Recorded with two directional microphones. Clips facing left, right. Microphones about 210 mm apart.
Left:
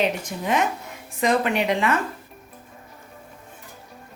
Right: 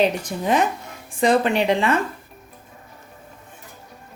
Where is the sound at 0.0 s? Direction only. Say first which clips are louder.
Right 4 dB; 35° right (ahead or behind).